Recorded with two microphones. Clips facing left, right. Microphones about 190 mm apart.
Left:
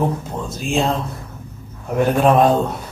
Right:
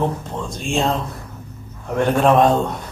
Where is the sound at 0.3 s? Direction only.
5° left (ahead or behind).